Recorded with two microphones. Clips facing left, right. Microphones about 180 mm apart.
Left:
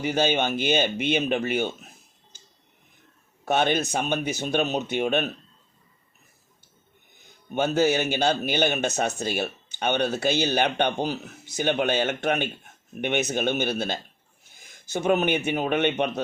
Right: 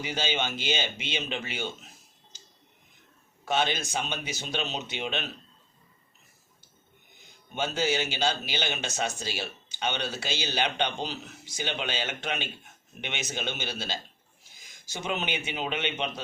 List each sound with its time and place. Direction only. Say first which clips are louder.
0.0 s speech: left 8 dB; 55° left (ahead or behind)
3.4 s speech: left 5 dB; 55° left (ahead or behind)
7.5 s speech: left 7 dB; 55° left (ahead or behind)